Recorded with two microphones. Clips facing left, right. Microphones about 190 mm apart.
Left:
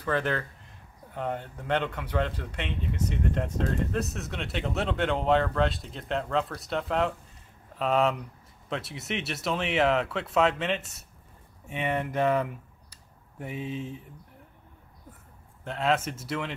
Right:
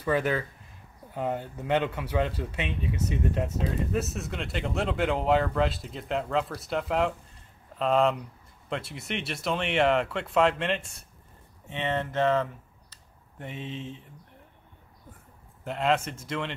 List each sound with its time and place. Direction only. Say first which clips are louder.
0.0 s speech: right 2 dB; 10° right (ahead or behind); by 13.8 s 10° left (ahead or behind)
15.6 s speech: right 1 dB; centre (ahead or behind)